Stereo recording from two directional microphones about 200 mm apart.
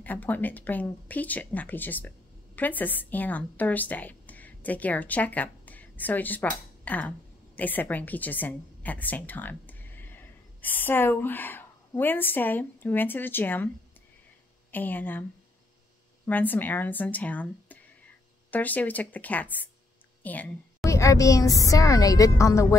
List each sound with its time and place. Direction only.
0.0 s speech: 10° left (ahead or behind)
14.7 s a woman's voice: 10° left (ahead or behind)
16.3 s a woman's voice: 10° left (ahead or behind)